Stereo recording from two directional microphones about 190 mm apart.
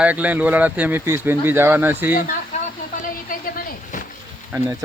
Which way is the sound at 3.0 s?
45° left (ahead or behind).